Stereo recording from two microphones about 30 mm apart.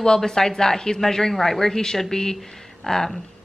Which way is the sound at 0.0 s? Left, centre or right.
Left.